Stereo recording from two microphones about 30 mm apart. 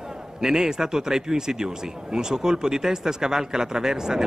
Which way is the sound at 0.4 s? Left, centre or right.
Centre.